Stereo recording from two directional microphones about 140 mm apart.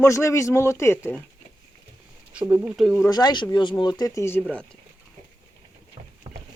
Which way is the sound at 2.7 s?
Centre (ahead or behind).